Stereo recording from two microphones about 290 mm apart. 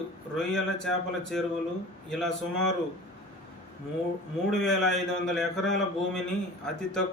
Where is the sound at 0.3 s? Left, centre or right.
Centre.